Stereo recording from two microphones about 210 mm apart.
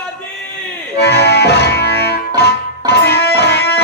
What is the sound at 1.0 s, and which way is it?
Music, 50° left (ahead or behind).